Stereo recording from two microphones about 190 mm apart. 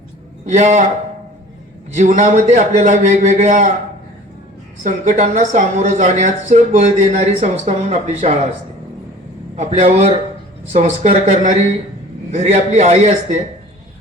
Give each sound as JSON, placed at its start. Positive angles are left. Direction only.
{"t": 0.4, "sound": "a woman's voice", "side_deg": -40}
{"t": 2.0, "sound": "a woman's voice", "side_deg": -40}
{"t": 4.8, "sound": "a woman's voice", "side_deg": -40}
{"t": 9.6, "sound": "a woman's voice", "side_deg": -35}